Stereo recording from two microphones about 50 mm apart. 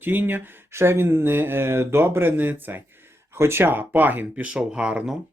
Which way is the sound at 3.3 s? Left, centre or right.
Right.